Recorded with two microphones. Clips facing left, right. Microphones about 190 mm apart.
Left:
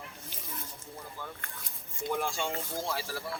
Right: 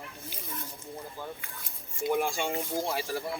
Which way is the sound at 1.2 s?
15° right (ahead or behind).